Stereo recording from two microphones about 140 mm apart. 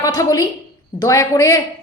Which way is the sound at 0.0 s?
25° left (ahead or behind).